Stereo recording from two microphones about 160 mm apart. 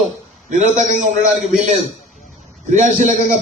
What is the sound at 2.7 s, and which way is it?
Speech, 50° right (ahead or behind).